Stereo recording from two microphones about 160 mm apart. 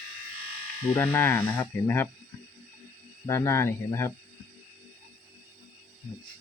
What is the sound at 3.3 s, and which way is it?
Speech, 15° left (ahead or behind).